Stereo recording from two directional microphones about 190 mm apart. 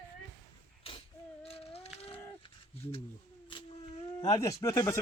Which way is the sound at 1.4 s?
30° left (ahead or behind).